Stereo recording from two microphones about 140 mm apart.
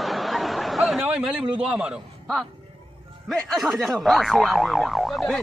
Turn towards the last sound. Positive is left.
turn(degrees=0)  # may be behind; listen again after turning